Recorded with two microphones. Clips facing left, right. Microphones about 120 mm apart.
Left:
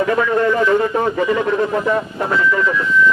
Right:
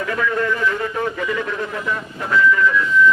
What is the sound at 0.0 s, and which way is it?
Speech, 30° left (ahead or behind).